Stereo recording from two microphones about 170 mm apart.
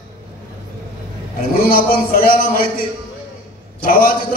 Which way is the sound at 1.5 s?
60° left (ahead or behind).